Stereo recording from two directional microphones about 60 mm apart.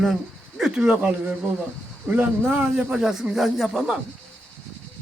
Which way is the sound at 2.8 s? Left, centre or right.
Centre.